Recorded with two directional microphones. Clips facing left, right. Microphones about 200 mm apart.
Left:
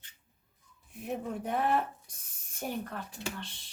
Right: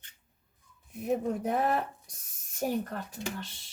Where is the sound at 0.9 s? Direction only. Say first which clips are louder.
Right 6 dB; 40° right (ahead or behind).